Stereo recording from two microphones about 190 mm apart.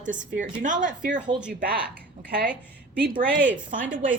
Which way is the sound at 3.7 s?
45° right (ahead or behind).